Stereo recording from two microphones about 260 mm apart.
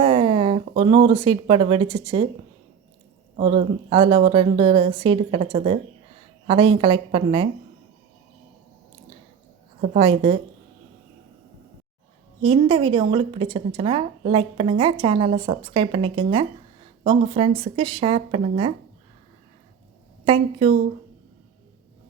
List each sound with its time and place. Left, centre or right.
0.0 s speech: centre
3.3 s a woman's voice: right
9.9 s a woman's voice: right
12.4 s a woman's voice: right
20.2 s a woman's voice: right